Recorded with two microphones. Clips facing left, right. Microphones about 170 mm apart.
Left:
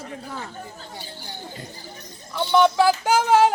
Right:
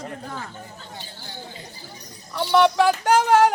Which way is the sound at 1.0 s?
15° left (ahead or behind).